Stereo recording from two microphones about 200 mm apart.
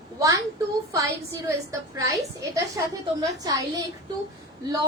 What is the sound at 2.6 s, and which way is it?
A woman's voice, 15° right (ahead or behind).